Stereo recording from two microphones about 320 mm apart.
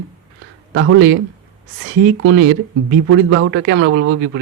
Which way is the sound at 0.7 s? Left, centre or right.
Right.